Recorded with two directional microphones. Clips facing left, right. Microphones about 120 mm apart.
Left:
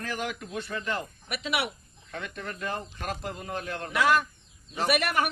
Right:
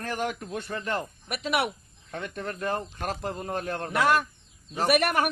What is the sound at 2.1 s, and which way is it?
Speech, 35° right (ahead or behind).